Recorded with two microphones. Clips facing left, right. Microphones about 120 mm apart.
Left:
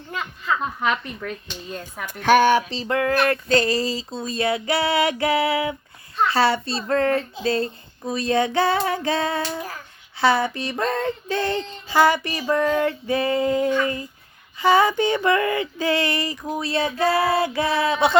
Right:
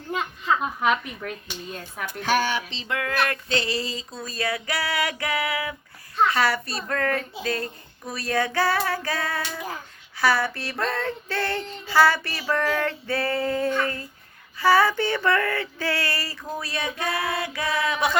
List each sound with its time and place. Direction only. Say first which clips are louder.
0.6 s speech: even; 5° right (ahead or behind)
2.0 s speech: left 8 dB; 60° left (ahead or behind)
2.6 s a sound: left 7 dB; 40° left (ahead or behind)
3.6 s female singing: left 6 dB; 40° left (ahead or behind); by 16.6 s 15° left (ahead or behind)
16.6 s female singing: left 9 dB; 30° left (ahead or behind)